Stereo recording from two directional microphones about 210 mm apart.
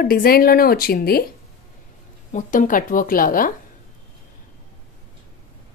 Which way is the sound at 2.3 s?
35° left (ahead or behind).